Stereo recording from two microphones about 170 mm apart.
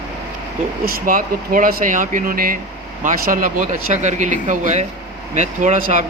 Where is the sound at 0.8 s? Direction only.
55° right (ahead or behind).